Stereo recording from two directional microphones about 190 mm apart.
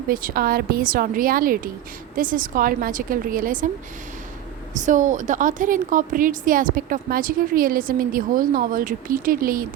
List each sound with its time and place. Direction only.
0.1 s a woman's voice: 45° right (ahead or behind)
4.7 s a woman's voice: 40° right (ahead or behind)